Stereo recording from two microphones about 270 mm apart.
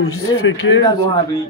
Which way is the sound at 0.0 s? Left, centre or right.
Left.